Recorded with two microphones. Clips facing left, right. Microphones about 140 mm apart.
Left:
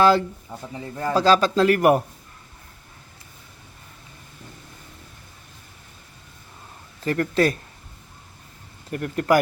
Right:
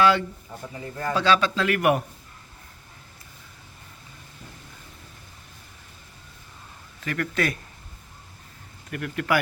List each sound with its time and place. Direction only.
0.0 s a man's voice: 35° left (ahead or behind)
7.0 s a man's voice: 35° left (ahead or behind)
8.9 s a man's voice: 35° left (ahead or behind)